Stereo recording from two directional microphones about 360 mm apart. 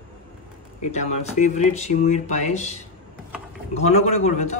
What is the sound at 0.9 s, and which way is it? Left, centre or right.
Speech, centre.